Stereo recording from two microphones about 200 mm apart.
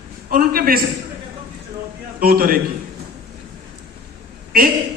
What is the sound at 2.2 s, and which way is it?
Speech, 45° right (ahead or behind).